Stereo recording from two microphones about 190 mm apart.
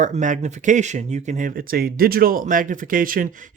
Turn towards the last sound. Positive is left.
turn(degrees=-45)  # may be behind; listen again after turning